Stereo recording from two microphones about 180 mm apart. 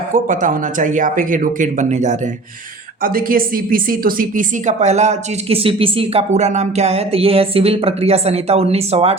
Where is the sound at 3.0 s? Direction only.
50° right (ahead or behind).